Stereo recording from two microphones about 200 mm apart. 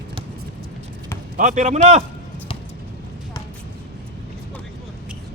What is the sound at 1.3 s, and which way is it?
Speech, 40° right (ahead or behind).